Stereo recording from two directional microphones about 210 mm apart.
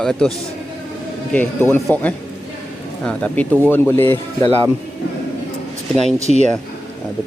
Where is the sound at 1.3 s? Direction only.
10° left (ahead or behind).